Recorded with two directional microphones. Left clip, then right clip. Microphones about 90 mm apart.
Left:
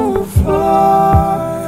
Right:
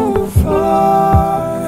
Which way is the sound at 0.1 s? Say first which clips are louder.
Even; centre (ahead or behind).